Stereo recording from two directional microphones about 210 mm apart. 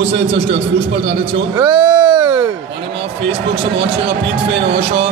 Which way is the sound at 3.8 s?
55° right (ahead or behind).